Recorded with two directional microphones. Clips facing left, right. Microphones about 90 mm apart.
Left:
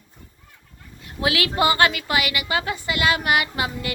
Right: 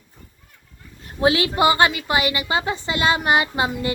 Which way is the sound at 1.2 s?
30° right (ahead or behind).